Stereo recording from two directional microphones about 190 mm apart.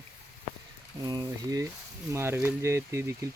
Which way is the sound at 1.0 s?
20° right (ahead or behind).